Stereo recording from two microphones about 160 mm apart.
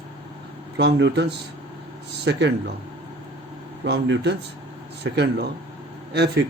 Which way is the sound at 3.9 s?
90° right.